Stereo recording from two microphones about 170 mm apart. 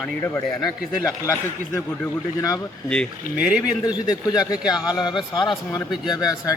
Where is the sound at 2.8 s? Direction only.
5° left (ahead or behind).